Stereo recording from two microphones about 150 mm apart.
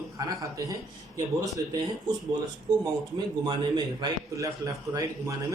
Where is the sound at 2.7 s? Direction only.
30° right (ahead or behind).